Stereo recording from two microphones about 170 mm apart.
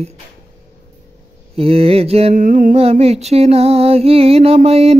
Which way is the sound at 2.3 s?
50° right (ahead or behind).